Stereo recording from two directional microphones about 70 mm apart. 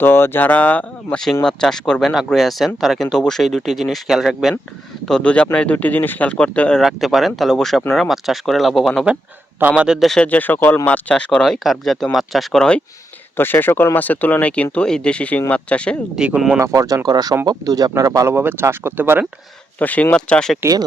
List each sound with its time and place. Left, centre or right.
0.0 s speech: left
1.5 s speech: centre
5.0 s speech: centre
6.8 s speech: centre
9.7 s speech: centre
10.2 s speech: left; by 12.8 s centre
13.3 s speech: left
16.1 s speech: centre
16.6 s speech: right
18.3 s speech: right
19.8 s speech: left